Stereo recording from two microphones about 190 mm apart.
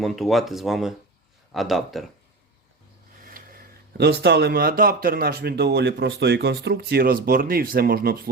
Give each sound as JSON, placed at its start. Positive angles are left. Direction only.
{"t": 0.0, "sound": "speech", "side_deg": 0}
{"t": 3.2, "sound": "speech", "side_deg": -45}